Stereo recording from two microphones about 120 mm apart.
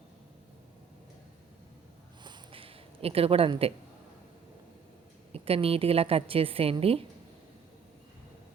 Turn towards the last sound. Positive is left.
turn(degrees=-55)  # may be behind; listen again after turning